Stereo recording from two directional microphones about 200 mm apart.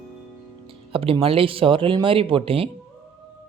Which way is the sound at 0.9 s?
30° right (ahead or behind).